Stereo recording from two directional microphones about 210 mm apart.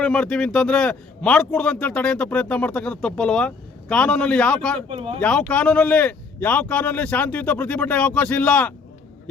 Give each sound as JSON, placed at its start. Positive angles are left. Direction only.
{"t": 0.0, "sound": "a man's voice", "side_deg": 5}
{"t": 4.9, "sound": "speech", "side_deg": -25}
{"t": 5.2, "sound": "a man's voice", "side_deg": 5}